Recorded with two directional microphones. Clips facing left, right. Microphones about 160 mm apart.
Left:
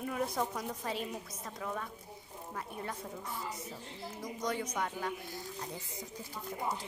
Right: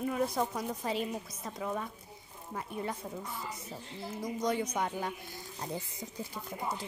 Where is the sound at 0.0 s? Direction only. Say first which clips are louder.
Right 3 dB; 5° right (ahead or behind).